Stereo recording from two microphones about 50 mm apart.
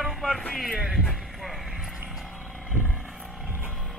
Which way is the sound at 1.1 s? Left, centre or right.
Centre.